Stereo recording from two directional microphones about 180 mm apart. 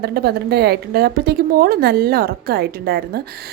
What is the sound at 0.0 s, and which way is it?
A woman's voice, 60° right (ahead or behind).